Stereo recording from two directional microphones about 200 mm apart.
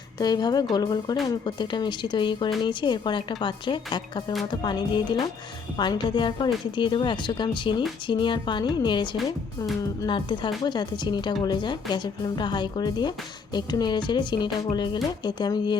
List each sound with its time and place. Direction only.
0.2 s speech: 20° left (ahead or behind)